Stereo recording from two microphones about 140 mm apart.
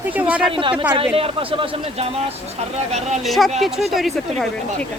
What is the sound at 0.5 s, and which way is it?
A man's voice, 40° right (ahead or behind).